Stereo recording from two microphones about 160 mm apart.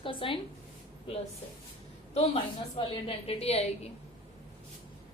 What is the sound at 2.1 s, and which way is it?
A woman's voice, 35° left (ahead or behind).